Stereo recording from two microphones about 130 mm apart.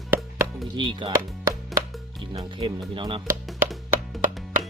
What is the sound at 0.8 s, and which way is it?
Speech, 35° right (ahead or behind).